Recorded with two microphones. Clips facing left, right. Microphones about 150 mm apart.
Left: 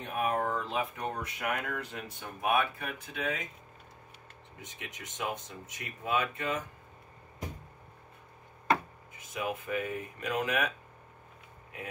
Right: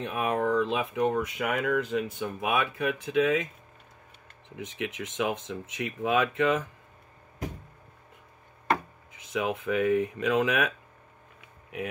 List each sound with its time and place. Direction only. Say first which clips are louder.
0.0 s speech: right 3 dB; 90° right
4.6 s speech: right 12 dB; 80° right
9.3 s speech: right 6 dB; 90° right